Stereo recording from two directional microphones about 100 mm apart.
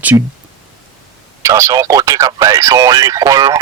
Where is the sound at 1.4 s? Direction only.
30° right (ahead or behind).